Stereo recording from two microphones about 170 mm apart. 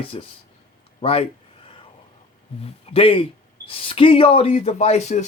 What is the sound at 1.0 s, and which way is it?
Speech, 35° left (ahead or behind).